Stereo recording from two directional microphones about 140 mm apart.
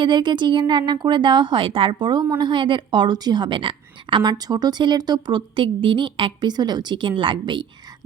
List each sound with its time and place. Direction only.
0.0 s a woman's voice: 35° right (ahead or behind)